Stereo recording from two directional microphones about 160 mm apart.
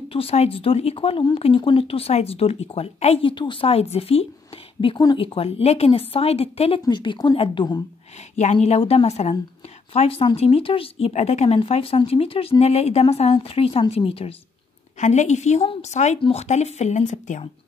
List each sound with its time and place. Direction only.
0.1 s speech: 35° left (ahead or behind)
8.4 s speech: 45° left (ahead or behind)